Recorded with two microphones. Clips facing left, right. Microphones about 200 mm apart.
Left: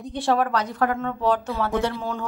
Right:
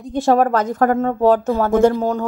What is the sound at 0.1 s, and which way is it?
Speech, 45° right (ahead or behind).